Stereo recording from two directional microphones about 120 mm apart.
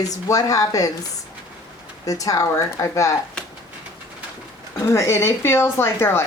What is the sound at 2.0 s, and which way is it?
Speech, 30° left (ahead or behind).